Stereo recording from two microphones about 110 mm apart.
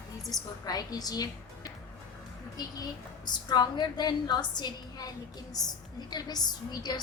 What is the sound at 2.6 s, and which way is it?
A woman's voice, 35° left (ahead or behind).